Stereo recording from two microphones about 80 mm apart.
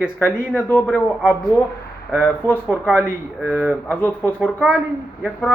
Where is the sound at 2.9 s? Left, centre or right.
Right.